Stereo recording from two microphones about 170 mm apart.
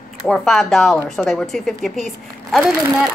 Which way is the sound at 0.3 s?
Centre (ahead or behind).